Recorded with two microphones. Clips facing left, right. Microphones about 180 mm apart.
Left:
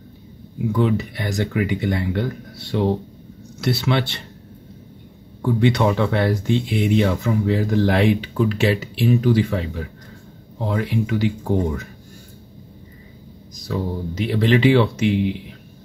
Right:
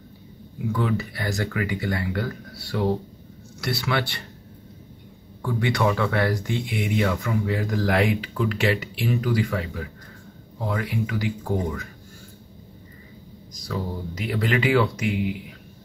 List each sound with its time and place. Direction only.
0.7 s speech: 20° left (ahead or behind)
5.4 s speech: 25° left (ahead or behind)
13.7 s speech: 25° left (ahead or behind)